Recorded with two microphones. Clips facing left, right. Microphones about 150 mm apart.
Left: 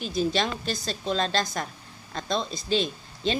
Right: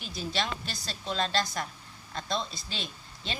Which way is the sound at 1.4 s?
45° left (ahead or behind).